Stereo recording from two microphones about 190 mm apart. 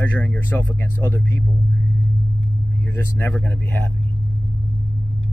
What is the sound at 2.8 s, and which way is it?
Speech, 10° left (ahead or behind).